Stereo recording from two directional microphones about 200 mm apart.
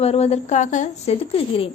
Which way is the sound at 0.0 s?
30° left (ahead or behind).